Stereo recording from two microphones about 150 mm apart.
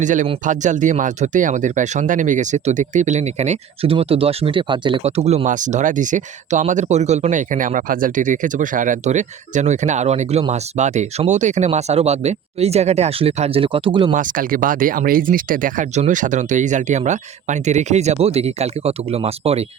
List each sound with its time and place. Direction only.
0.0 s speech: 55° right (ahead or behind); by 14.1 s 35° right (ahead or behind)
14.2 s speech: 65° right (ahead or behind); by 19.6 s 40° right (ahead or behind)